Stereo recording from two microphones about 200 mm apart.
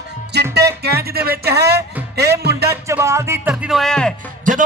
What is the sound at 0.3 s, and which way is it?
Music, 55° right (ahead or behind).